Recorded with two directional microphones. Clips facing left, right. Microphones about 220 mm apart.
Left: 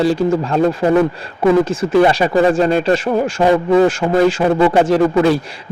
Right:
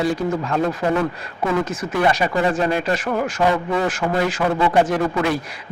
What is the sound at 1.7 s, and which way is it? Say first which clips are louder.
Speech: left 7 dB; 30° left (ahead or behind).